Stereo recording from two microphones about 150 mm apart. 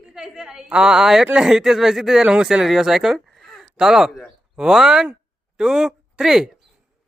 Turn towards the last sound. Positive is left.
turn(degrees=-5)  # may be behind; listen again after turning